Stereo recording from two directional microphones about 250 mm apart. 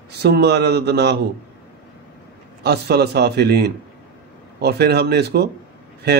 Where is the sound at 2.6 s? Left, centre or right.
Right.